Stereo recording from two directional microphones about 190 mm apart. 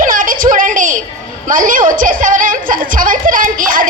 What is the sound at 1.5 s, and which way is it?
A woman's voice, 45° right (ahead or behind).